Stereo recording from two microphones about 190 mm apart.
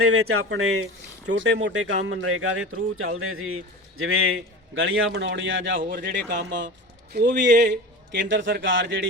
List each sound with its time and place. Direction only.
0.0 s a man's voice: 90° right
1.3 s speech: 65° right (ahead or behind)
1.6 s a man's voice: 80° right
5.8 s speech: 50° right (ahead or behind)
7.6 s a sound: 65° right (ahead or behind)
8.6 s speech: 80° right